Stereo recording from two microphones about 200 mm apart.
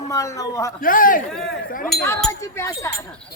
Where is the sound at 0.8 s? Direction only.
45° left (ahead or behind).